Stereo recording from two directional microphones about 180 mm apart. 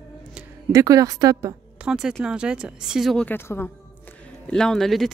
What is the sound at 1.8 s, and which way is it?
Speech, 5° right (ahead or behind).